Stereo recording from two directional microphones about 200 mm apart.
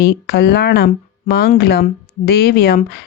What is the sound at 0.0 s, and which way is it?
Speech, 55° left (ahead or behind).